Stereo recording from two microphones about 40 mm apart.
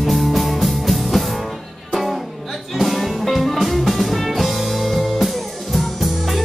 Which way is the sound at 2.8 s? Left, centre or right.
Centre.